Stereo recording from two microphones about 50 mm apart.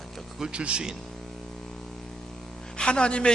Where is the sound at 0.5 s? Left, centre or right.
Right.